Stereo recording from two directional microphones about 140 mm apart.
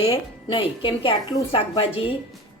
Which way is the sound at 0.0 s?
40° left (ahead or behind).